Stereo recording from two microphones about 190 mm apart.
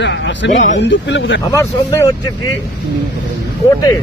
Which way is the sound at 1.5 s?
15° left (ahead or behind).